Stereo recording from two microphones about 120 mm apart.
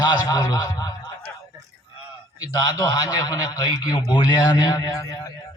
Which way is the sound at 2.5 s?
30° left (ahead or behind).